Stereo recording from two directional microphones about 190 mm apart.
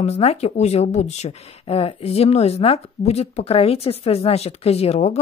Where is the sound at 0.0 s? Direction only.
35° left (ahead or behind).